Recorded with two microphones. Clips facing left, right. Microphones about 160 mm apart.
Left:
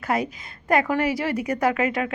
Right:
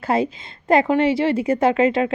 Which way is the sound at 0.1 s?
25° right (ahead or behind).